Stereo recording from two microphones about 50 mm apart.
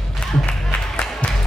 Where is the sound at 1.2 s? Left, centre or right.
Left.